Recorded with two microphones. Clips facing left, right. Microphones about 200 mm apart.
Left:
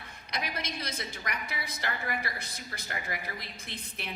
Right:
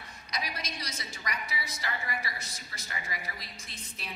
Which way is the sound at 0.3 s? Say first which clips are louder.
Left 2 dB; 55° left (ahead or behind).